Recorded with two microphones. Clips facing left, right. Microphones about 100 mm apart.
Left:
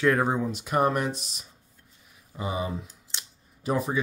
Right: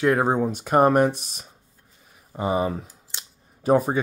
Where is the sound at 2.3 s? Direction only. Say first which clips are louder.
Right 7 dB; 45° right (ahead or behind).